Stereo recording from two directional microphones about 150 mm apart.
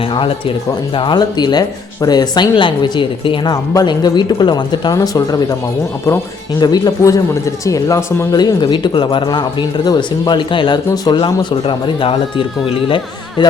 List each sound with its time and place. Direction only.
0.1 s speech: 35° left (ahead or behind)
6.6 s speech: 25° left (ahead or behind)